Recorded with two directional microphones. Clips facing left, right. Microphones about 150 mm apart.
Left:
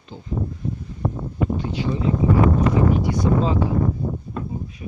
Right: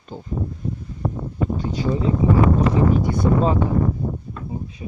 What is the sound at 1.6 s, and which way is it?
Speech, 40° right (ahead or behind).